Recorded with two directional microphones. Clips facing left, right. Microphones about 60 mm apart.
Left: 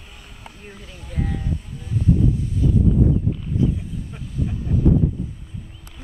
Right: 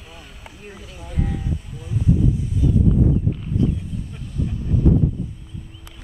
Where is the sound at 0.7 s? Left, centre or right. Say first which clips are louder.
Right 1 dB; centre.